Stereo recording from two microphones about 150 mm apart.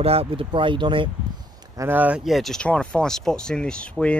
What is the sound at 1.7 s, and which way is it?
Speech, 15° right (ahead or behind).